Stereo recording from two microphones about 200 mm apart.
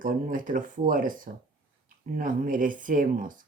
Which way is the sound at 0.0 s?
45° right (ahead or behind).